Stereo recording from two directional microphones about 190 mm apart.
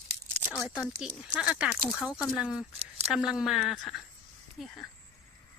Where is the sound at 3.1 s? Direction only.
5° right (ahead or behind).